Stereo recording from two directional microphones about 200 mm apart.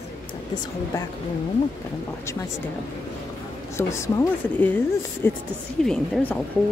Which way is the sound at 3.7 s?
15° left (ahead or behind).